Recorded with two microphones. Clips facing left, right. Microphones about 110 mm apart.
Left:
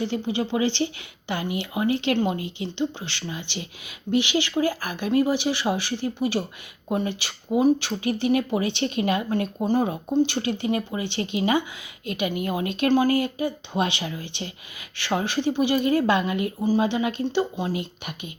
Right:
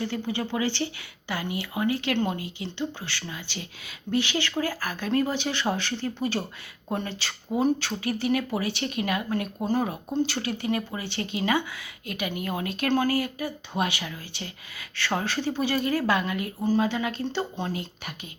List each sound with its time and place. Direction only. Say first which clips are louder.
0.0 s speech: left 4 dB; 20° left (ahead or behind)